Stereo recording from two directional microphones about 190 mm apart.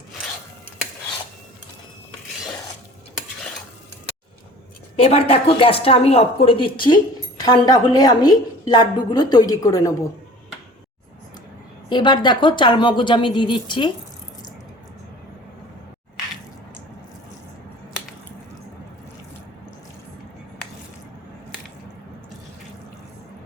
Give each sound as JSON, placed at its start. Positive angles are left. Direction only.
{"t": 4.9, "sound": "a woman's voice", "side_deg": 30}
{"t": 11.9, "sound": "a woman's voice", "side_deg": 25}